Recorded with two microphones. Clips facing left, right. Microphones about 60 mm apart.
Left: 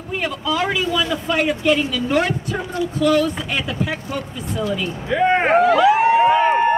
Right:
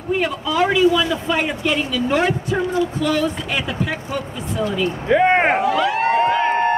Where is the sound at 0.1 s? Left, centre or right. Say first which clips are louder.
Right 2 dB; centre.